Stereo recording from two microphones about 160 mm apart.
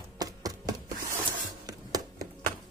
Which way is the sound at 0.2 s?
20° right (ahead or behind).